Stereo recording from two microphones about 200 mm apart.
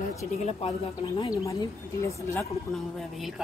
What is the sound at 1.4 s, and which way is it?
Speech, 15° left (ahead or behind).